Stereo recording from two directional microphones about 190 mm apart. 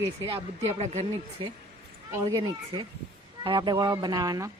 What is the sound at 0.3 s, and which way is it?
Speech, 30° right (ahead or behind).